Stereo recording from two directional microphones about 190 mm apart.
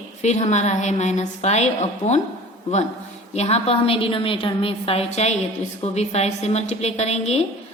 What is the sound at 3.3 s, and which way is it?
A woman's voice, 35° left (ahead or behind).